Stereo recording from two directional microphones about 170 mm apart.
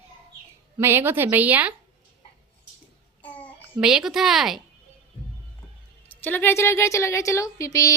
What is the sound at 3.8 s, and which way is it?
Speech, 5° right (ahead or behind).